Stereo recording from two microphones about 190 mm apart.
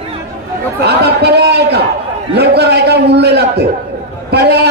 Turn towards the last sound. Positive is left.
turn(degrees=-60)  # may be behind; listen again after turning